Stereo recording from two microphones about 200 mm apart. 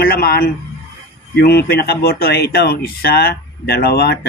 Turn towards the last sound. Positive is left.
turn(degrees=50)  # may be behind; listen again after turning